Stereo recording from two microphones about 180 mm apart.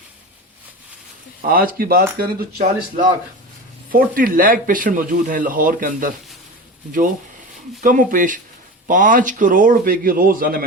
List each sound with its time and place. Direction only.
1.4 s speech: 50° right (ahead or behind)
7.8 s speech: 45° right (ahead or behind)